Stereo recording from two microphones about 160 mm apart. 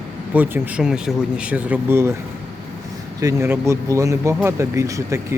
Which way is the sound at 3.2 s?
15° right (ahead or behind).